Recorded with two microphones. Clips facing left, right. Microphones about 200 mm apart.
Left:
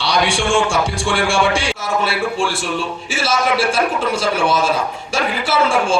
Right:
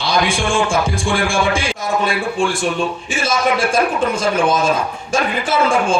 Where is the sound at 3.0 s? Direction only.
90° left.